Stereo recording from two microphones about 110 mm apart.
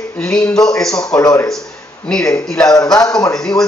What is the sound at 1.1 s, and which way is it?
Speech, 15° left (ahead or behind).